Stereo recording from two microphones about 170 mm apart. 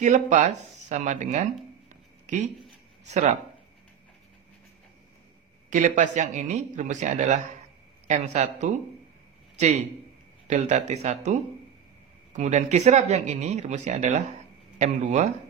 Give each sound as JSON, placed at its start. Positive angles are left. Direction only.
{"t": 0.0, "sound": "speech", "side_deg": -45}
{"t": 1.9, "sound": "a sound", "side_deg": -45}
{"t": 3.1, "sound": "speech", "side_deg": -45}
{"t": 5.7, "sound": "a man's voice", "side_deg": -50}